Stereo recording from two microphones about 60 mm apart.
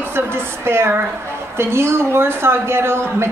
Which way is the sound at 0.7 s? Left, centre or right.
Right.